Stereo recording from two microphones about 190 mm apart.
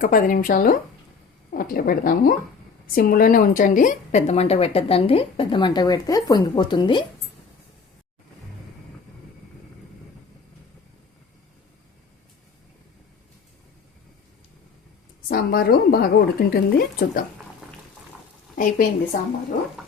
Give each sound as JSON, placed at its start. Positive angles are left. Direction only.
{"t": 0.0, "sound": "a woman's voice", "side_deg": 45}
{"t": 15.3, "sound": "speech", "side_deg": 55}
{"t": 18.5, "sound": "a woman's voice", "side_deg": 45}